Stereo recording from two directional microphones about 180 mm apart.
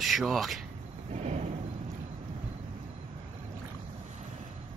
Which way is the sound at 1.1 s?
40° right (ahead or behind).